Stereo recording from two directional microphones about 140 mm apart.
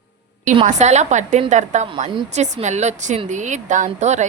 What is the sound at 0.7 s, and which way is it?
A woman's voice, 55° right (ahead or behind).